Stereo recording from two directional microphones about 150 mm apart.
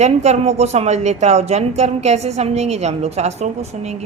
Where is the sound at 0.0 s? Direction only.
45° right (ahead or behind).